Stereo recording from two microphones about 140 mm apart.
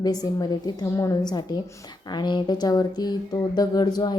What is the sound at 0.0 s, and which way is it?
A woman's voice, 25° left (ahead or behind).